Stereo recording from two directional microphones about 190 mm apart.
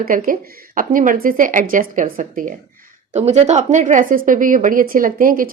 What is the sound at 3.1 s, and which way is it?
Speech, 35° right (ahead or behind).